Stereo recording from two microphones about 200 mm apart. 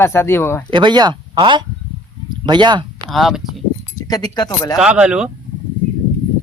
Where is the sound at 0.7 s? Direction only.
20° right (ahead or behind).